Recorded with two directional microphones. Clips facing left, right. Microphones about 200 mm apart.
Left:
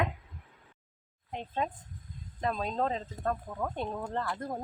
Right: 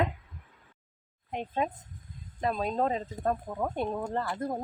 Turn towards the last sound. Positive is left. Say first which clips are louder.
# right 3 dB
turn(degrees=-10)  # may be behind; listen again after turning